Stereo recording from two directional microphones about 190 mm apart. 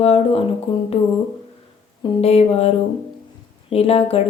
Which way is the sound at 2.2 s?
30° left (ahead or behind).